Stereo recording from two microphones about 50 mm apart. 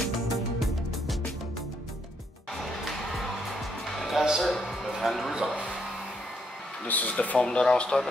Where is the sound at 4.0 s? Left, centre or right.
Centre.